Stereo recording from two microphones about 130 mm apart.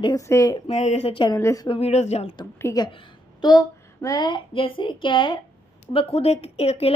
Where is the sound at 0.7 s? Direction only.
60° left (ahead or behind); by 1.3 s 45° left (ahead or behind).